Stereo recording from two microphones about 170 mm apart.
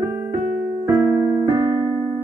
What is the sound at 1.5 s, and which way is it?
Keyboard, 30° right (ahead or behind).